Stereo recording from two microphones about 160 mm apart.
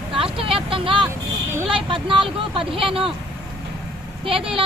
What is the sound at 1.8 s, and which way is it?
Speech, 30° right (ahead or behind).